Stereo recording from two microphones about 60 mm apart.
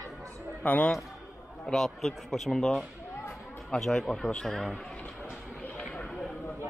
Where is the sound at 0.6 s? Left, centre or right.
Left.